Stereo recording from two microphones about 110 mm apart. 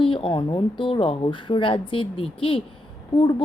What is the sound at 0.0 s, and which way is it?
Speech, 50° left (ahead or behind).